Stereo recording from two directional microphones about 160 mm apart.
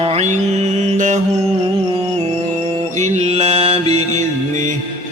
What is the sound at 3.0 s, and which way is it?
Mantra, 40° right (ahead or behind).